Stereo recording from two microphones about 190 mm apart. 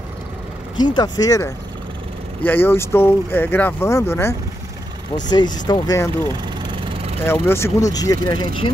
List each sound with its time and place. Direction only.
0.7 s speech: 20° left (ahead or behind)
7.4 s speech: 15° left (ahead or behind)